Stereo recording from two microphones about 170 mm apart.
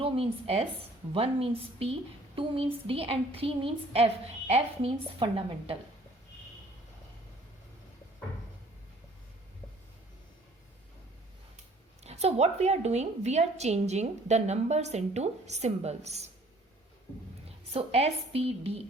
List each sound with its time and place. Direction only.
0.0 s a woman's voice: 35° right (ahead or behind)
12.0 s a woman's voice: 40° right (ahead or behind)
17.7 s a woman's voice: 35° right (ahead or behind)